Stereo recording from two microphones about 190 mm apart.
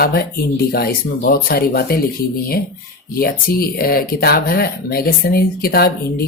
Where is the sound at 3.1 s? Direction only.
50° left (ahead or behind).